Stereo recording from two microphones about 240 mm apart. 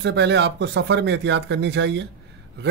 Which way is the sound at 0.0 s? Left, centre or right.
Right.